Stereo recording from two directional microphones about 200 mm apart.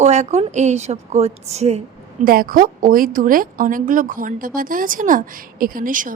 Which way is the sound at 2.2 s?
45° right (ahead or behind).